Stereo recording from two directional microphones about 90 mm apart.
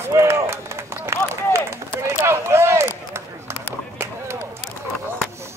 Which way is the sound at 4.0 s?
30° right (ahead or behind).